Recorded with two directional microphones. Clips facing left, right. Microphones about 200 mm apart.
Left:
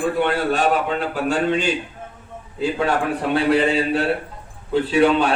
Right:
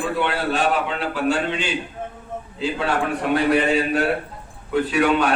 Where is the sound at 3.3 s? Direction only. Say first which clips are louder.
Left 1 dB; 30° left (ahead or behind).